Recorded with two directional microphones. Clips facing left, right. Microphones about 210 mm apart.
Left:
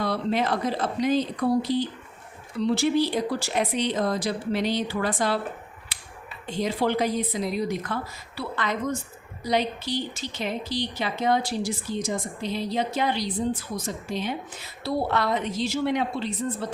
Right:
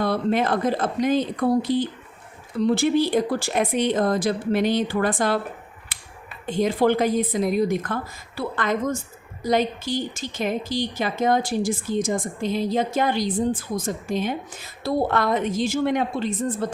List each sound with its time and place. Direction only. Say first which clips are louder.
0.0 s a woman's voice: right 4 dB; 50° right (ahead or behind)
5.9 s finger snapping: even; 50° right (ahead or behind)
6.4 s a woman's voice: right 5 dB; 50° right (ahead or behind)